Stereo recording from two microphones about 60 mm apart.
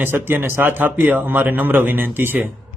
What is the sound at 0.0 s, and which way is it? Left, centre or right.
Speech, right.